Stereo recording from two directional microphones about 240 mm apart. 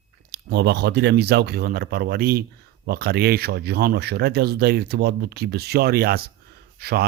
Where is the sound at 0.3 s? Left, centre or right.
Right.